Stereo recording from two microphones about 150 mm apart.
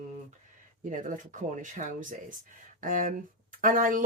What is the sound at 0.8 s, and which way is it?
Speech, 60° right (ahead or behind).